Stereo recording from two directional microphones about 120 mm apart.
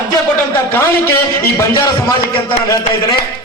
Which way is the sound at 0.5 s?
20° left (ahead or behind).